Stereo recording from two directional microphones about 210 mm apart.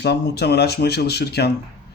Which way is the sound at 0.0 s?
50° left (ahead or behind).